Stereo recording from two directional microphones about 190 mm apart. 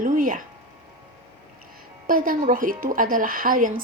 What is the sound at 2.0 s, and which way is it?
A woman's voice, 45° right (ahead or behind).